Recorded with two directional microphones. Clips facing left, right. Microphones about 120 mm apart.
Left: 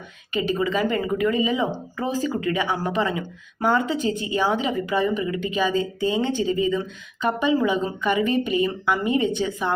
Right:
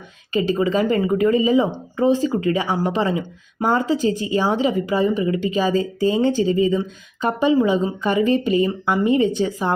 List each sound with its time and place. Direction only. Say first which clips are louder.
0.3 s speech: right 4 dB; 30° right (ahead or behind)